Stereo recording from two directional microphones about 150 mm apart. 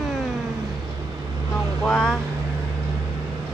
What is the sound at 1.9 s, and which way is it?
Vehicle, 5° left (ahead or behind).